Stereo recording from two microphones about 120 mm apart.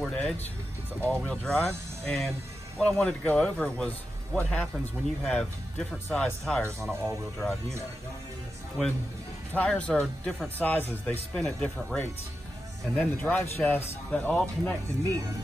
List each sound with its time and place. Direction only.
0.0 s music: 5° left (ahead or behind)
1.0 s speech: 10° left (ahead or behind)
6.8 s speech: 20° right (ahead or behind)
8.8 s speech: centre (ahead or behind)
9.5 s speech: 10° left (ahead or behind)